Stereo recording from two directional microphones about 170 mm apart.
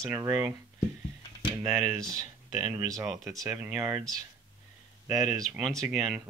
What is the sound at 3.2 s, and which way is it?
Speech, 15° right (ahead or behind).